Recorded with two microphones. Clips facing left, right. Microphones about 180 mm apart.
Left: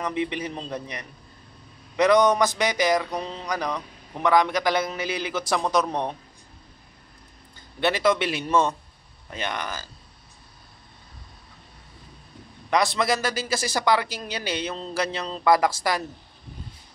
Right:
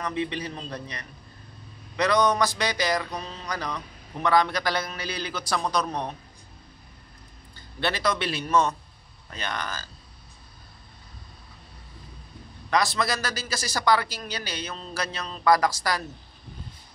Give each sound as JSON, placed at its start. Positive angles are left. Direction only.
{"t": 0.0, "sound": "a man's voice", "side_deg": 15}
{"t": 7.8, "sound": "a man's voice", "side_deg": 20}
{"t": 12.6, "sound": "a man's voice", "side_deg": 20}